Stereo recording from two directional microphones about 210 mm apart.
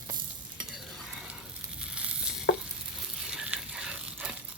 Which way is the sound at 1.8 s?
5° right (ahead or behind).